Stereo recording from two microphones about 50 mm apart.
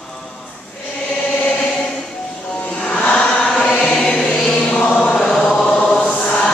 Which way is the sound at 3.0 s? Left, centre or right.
Left.